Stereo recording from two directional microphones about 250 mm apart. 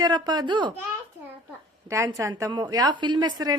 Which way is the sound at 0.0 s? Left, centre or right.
Centre.